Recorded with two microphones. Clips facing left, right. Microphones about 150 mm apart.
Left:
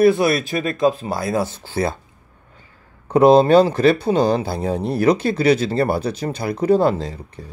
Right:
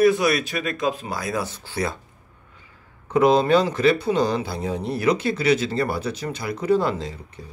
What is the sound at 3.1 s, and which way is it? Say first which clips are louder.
Speech: left 6 dB; 35° left (ahead or behind).